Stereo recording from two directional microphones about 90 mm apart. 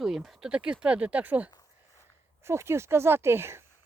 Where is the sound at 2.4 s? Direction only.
30° right (ahead or behind).